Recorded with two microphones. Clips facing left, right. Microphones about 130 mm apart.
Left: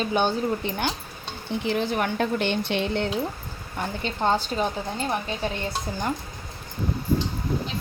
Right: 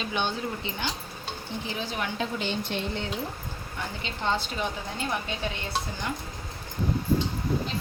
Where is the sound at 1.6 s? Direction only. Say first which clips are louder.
Left 9 dB; 65° left (ahead or behind).